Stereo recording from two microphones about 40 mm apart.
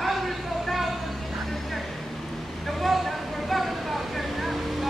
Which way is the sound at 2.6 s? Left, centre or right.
Centre.